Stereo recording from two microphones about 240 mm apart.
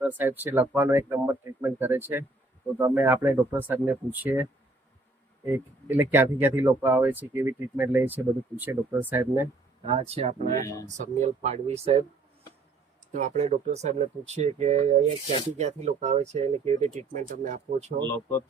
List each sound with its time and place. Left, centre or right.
0.0 s speech: centre
5.5 s speech: centre
9.8 s speech: right
13.1 s speech: right